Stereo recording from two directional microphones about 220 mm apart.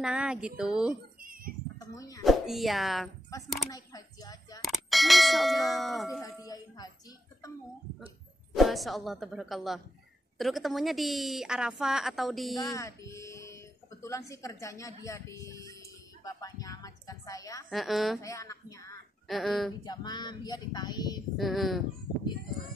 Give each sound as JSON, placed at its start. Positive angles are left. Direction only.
{"t": 0.0, "sound": "a woman's voice", "side_deg": -5}
{"t": 1.2, "sound": "a sound", "side_deg": -40}
{"t": 1.8, "sound": "a sound", "side_deg": 15}
{"t": 2.2, "sound": "a woman's voice", "side_deg": 0}
{"t": 3.7, "sound": "speech", "side_deg": 15}
{"t": 4.6, "sound": "a woman's voice", "side_deg": 0}
{"t": 6.4, "sound": "speech", "side_deg": 15}
{"t": 8.5, "sound": "a woman's voice", "side_deg": 0}
{"t": 12.5, "sound": "speech", "side_deg": 15}
{"t": 17.6, "sound": "a woman's voice", "side_deg": 0}
{"t": 18.2, "sound": "speech", "side_deg": 15}
{"t": 19.2, "sound": "a woman's voice", "side_deg": 0}
{"t": 19.8, "sound": "speech", "side_deg": 20}
{"t": 21.4, "sound": "a woman's voice", "side_deg": 0}